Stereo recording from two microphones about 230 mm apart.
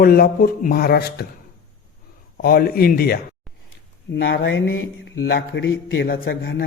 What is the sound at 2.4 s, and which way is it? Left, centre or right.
Speech, left.